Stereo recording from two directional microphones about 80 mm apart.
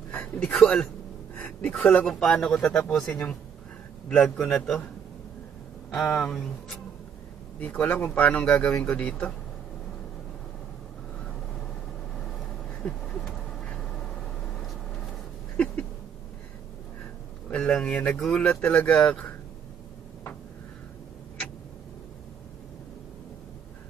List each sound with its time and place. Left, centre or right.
0.1 s a sound: centre
0.6 s speech: centre
1.3 s speech: centre
4.2 s speech: centre
5.9 s speech: centre
7.8 s speech: centre
12.6 s a sound: centre
15.5 s a sound: centre
17.5 s speech: centre